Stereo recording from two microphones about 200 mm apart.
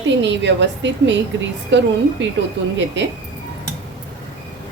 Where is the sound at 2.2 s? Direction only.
70° right (ahead or behind).